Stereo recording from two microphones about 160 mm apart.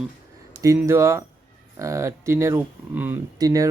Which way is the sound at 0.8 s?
15° right (ahead or behind).